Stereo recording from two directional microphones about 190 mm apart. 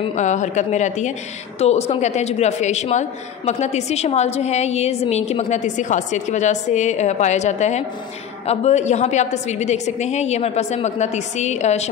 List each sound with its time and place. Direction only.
0.0 s a woman's voice: 40° left (ahead or behind)